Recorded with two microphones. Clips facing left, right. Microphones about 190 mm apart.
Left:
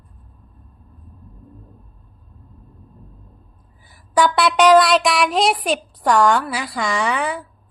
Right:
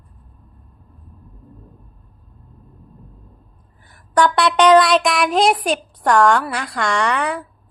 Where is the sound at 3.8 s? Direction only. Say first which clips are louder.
Right 1 dB; 5° left (ahead or behind).